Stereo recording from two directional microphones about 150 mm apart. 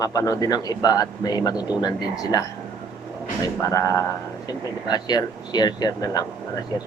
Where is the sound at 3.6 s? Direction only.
20° left (ahead or behind).